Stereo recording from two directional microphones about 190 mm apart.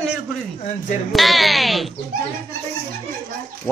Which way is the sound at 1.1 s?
Centre (ahead or behind).